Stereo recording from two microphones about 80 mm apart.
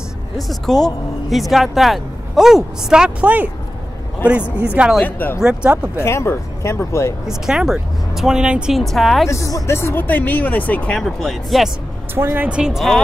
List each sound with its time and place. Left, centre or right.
0.4 s speech: centre
4.6 s speech: centre
5.0 s speech: left
5.4 s speech: centre
5.9 s speech: left
7.2 s speech: centre
8.7 s speech: centre
9.3 s speech: left
10.0 s speech: left
11.0 s speech: centre
12.2 s speech: right
12.4 s speech: centre